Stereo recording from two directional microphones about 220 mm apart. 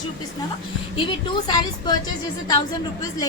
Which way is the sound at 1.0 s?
20° left (ahead or behind).